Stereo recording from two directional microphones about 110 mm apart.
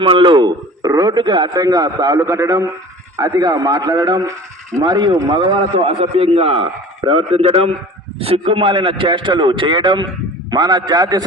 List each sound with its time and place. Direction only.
0.0 s a man's voice: 50° right (ahead or behind)
5.4 s a man's voice: 50° right (ahead or behind)
8.4 s a man's voice: 45° right (ahead or behind)